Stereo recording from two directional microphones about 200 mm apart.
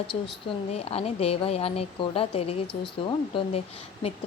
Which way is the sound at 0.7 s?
30° left (ahead or behind).